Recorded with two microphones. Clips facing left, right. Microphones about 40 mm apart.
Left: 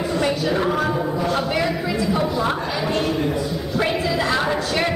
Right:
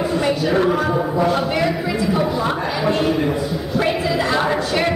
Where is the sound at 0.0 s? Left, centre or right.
Centre.